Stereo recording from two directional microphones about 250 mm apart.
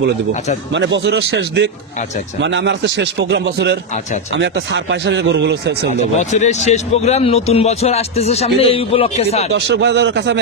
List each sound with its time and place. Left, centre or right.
0.7 s a man's voice: right
6.1 s speech: left
9.5 s a man's voice: right